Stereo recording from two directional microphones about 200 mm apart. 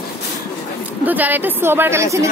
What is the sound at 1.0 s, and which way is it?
Speech, 10° right (ahead or behind).